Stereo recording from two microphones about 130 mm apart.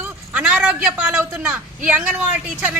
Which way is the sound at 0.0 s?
10° right (ahead or behind).